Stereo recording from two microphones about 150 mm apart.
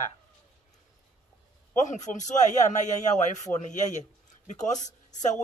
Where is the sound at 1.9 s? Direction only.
55° left (ahead or behind).